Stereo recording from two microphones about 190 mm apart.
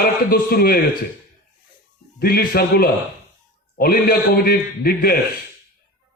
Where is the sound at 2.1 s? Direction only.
55° left (ahead or behind).